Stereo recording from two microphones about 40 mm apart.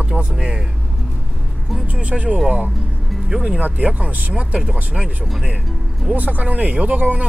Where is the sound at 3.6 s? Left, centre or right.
Right.